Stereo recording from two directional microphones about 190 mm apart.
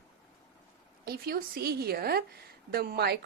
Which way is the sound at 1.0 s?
55° right (ahead or behind).